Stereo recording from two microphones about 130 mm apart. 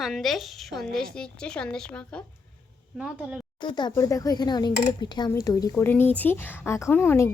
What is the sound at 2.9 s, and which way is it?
Speech, 5° right (ahead or behind).